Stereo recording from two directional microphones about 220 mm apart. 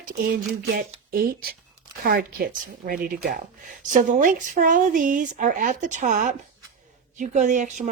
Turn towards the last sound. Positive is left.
turn(degrees=-35)  # may be behind; listen again after turning